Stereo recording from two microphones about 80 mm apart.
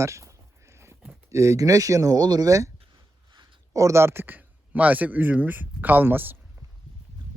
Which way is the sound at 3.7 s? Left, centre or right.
Right.